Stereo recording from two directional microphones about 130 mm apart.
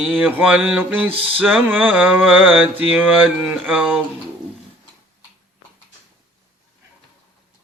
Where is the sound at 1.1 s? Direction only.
45° right (ahead or behind).